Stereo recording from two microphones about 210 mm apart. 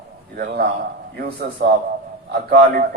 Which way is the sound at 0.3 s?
50° right (ahead or behind).